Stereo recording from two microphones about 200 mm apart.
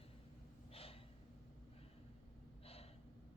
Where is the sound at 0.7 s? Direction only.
30° left (ahead or behind).